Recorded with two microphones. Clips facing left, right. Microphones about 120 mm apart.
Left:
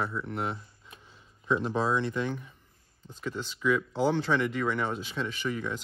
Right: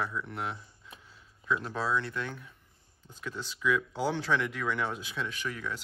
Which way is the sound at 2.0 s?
5° left (ahead or behind).